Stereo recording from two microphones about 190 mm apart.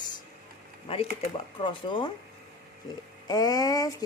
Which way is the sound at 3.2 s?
20° left (ahead or behind).